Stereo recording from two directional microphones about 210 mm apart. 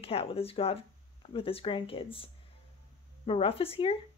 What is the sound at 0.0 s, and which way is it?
Speech, 25° left (ahead or behind).